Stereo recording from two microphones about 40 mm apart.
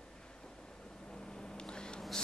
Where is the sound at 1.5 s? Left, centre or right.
Left.